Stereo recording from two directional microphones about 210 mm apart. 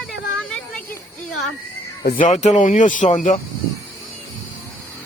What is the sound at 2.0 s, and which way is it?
Speech, 40° left (ahead or behind).